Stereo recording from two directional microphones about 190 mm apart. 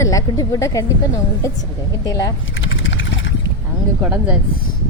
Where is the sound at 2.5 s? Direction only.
80° left.